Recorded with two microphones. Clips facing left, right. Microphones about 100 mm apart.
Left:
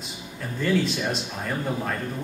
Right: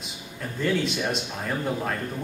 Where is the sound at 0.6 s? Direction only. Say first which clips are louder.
Left 1 dB; centre (ahead or behind).